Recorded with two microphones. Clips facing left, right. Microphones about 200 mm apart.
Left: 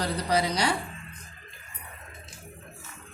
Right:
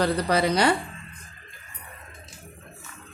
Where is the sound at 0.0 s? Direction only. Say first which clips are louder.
Right 4 dB; 60° right (ahead or behind).